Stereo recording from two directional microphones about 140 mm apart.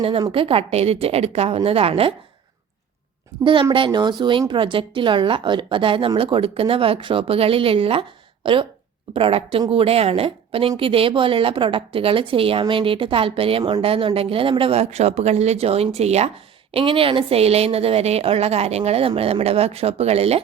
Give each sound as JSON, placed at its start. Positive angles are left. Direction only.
{"t": 0.0, "sound": "a woman's voice", "side_deg": -45}
{"t": 3.4, "sound": "a woman's voice", "side_deg": -35}
{"t": 16.7, "sound": "a woman's voice", "side_deg": -40}